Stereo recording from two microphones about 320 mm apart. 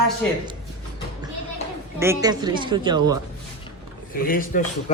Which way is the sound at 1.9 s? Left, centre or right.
Centre.